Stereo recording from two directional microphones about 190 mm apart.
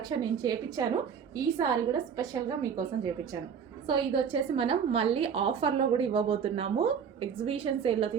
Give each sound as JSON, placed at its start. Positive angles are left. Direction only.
{"t": 0.2, "sound": "a woman's voice", "side_deg": -20}